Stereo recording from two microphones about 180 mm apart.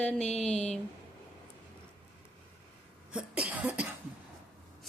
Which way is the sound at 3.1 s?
5° right (ahead or behind).